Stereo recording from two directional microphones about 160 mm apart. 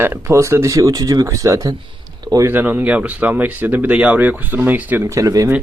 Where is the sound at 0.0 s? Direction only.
15° right (ahead or behind).